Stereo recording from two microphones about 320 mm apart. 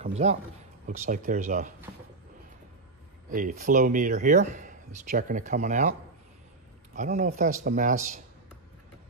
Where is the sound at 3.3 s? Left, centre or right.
Right.